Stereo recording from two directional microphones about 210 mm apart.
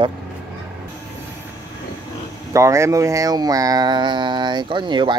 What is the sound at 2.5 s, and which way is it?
Speech, 15° right (ahead or behind).